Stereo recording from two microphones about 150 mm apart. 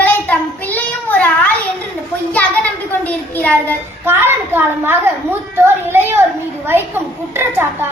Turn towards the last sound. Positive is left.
turn(degrees=-15)  # may be behind; listen again after turning